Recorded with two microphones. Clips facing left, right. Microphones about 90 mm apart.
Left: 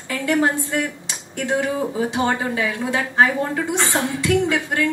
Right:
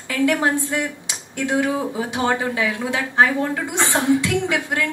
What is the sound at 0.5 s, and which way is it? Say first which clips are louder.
A woman's voice: even; 20° right (ahead or behind).